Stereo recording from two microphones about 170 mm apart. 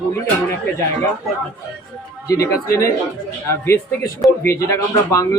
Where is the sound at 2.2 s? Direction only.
20° left (ahead or behind).